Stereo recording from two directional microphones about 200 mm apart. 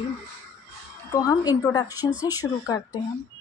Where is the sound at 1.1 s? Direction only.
15° left (ahead or behind).